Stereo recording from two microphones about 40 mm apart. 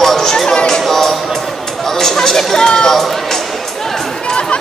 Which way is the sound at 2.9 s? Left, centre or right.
Centre.